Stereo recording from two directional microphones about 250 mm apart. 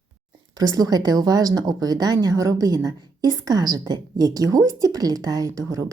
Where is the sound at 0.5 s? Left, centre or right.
Centre.